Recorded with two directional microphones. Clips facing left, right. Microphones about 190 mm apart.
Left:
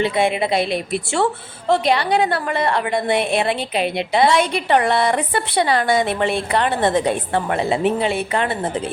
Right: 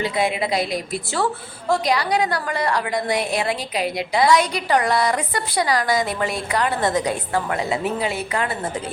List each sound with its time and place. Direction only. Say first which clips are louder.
0.0 s a woman's voice: left 4 dB; 25° left (ahead or behind)